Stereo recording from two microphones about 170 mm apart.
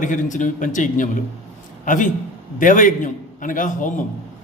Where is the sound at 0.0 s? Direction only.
50° left (ahead or behind).